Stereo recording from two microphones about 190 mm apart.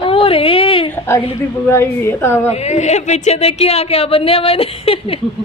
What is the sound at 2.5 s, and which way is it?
A woman's voice, 35° left (ahead or behind).